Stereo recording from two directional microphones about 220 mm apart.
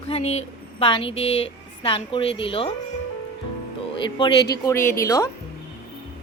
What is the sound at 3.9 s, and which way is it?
Speech, 20° left (ahead or behind).